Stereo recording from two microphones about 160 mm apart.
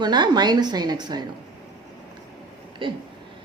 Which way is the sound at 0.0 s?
25° right (ahead or behind).